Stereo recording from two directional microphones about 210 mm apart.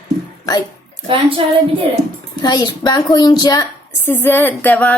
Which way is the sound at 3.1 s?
20° left (ahead or behind).